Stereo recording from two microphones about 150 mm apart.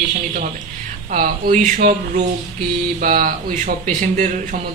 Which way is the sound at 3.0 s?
60° right (ahead or behind).